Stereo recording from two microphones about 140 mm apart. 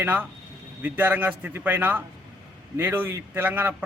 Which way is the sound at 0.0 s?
15° right (ahead or behind).